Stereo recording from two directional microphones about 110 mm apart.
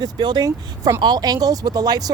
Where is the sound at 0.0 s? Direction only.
40° right (ahead or behind).